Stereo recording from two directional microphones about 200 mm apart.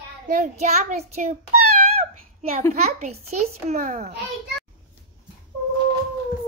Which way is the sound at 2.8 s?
35° right (ahead or behind).